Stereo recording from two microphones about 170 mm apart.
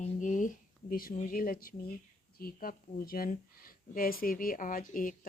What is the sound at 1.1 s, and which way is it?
Speech, 50° left (ahead or behind).